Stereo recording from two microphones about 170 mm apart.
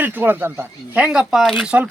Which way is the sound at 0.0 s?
10° right (ahead or behind).